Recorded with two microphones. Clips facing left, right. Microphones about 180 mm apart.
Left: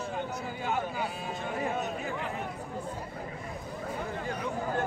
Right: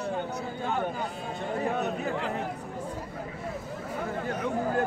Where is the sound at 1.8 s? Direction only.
60° right (ahead or behind).